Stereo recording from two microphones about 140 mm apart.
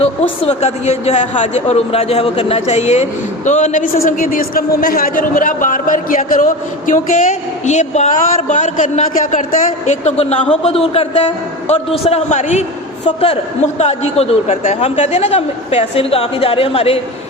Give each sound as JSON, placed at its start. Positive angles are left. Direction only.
{"t": 0.0, "sound": "a man's voice", "side_deg": 50}
{"t": 9.8, "sound": "a man's voice", "side_deg": 55}
{"t": 13.7, "sound": "a man's voice", "side_deg": 50}